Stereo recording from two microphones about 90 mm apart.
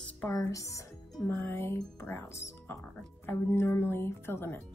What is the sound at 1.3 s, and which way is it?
Speech, 25° left (ahead or behind).